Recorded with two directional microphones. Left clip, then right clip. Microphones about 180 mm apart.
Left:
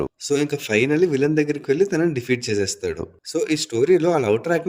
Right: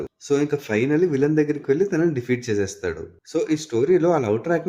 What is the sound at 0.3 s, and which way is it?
Speech, 50° left (ahead or behind).